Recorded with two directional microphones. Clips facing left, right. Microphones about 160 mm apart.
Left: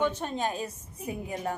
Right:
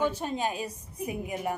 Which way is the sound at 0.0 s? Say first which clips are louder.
Even; 10° right (ahead or behind).